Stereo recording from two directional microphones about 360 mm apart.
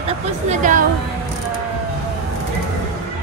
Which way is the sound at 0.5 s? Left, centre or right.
Right.